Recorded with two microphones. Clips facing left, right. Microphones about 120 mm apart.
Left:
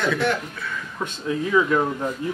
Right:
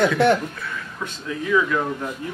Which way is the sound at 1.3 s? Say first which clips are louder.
Left 1 dB; 30° left (ahead or behind).